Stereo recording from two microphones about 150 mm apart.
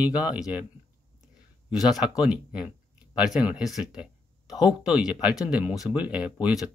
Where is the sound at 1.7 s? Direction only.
Centre (ahead or behind).